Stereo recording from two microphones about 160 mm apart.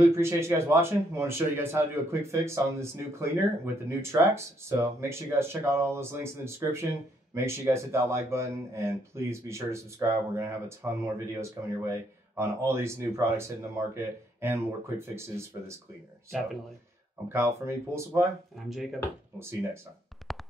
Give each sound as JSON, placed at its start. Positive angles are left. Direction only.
{"t": 0.0, "sound": "speech", "side_deg": -15}
{"t": 17.3, "sound": "speech", "side_deg": -15}
{"t": 18.7, "sound": "speech", "side_deg": 0}
{"t": 19.3, "sound": "speech", "side_deg": -15}
{"t": 20.3, "sound": "music", "side_deg": 0}